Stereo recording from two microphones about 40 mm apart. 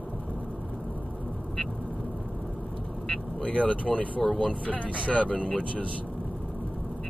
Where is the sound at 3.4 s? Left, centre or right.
Left.